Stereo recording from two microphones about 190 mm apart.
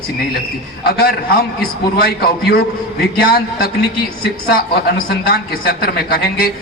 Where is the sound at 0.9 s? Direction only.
55° left (ahead or behind).